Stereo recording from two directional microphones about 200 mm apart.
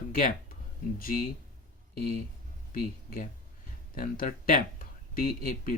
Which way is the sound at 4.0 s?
45° left (ahead or behind).